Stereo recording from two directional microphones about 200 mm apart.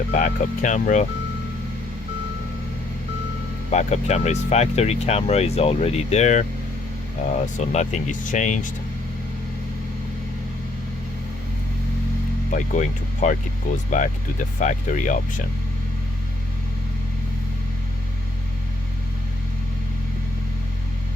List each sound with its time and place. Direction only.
0.1 s speech: 40° left (ahead or behind)
3.7 s speech: 35° left (ahead or behind)
7.7 s speech: 35° left (ahead or behind)
12.5 s speech: 40° left (ahead or behind)